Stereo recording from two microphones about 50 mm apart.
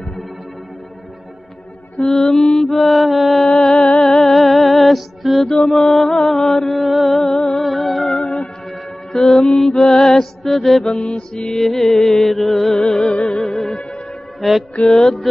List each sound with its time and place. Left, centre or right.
2.0 s mantra: centre
3.4 s music: centre
10.9 s mantra: left
11.5 s music: centre